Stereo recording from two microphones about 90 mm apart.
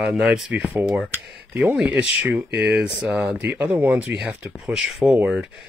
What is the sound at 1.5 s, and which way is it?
Speech, 15° right (ahead or behind).